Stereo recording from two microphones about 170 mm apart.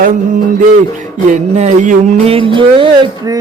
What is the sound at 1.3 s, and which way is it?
Speech, 45° right (ahead or behind).